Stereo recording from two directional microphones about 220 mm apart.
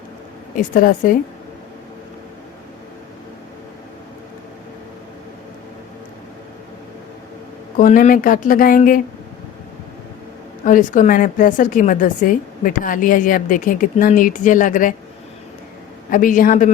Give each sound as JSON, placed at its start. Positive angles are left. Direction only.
{"t": 0.5, "sound": "a woman's voice", "side_deg": 40}
{"t": 7.8, "sound": "a woman's voice", "side_deg": 35}
{"t": 10.6, "sound": "a woman's voice", "side_deg": 35}
{"t": 16.0, "sound": "a woman's voice", "side_deg": 40}